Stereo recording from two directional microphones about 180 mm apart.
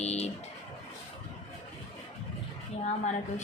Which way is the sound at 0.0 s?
35° left (ahead or behind).